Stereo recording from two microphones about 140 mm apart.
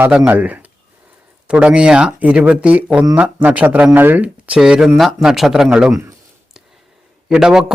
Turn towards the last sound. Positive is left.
turn(degrees=-5)  # may be behind; listen again after turning